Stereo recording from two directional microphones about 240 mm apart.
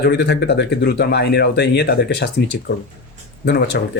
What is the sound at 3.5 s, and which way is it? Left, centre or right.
Speech, left.